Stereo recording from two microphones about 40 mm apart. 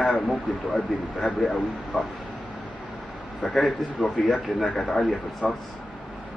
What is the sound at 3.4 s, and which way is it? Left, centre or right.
A man's voice, centre.